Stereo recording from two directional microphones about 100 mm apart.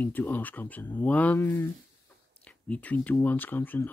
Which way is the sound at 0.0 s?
20° left (ahead or behind).